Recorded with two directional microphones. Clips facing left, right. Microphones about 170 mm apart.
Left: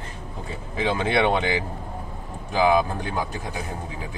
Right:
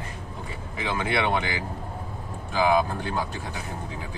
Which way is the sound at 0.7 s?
30° left (ahead or behind).